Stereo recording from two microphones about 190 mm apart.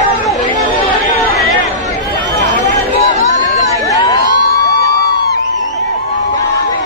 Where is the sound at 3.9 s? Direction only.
15° left (ahead or behind).